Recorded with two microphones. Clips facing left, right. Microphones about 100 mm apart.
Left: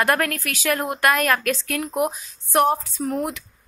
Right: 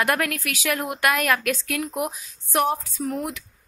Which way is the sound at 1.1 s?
10° right (ahead or behind).